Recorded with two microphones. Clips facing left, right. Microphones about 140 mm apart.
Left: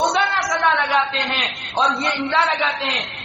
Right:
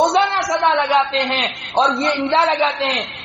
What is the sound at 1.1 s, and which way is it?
A man's voice, 30° right (ahead or behind).